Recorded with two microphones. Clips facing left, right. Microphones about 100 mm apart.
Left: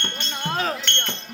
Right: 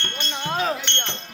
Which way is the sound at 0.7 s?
10° right (ahead or behind).